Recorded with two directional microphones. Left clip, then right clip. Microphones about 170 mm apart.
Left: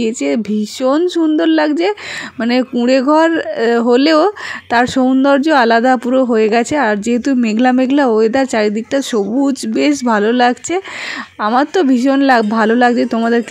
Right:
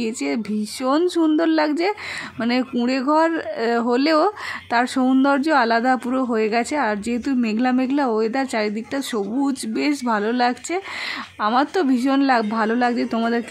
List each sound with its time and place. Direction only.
0.0 s speech: 25° left (ahead or behind)